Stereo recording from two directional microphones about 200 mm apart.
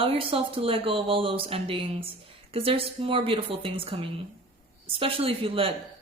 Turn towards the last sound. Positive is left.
turn(degrees=-30)  # may be behind; listen again after turning